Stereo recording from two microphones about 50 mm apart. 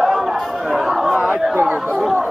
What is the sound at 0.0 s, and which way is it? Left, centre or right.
Chatter, centre.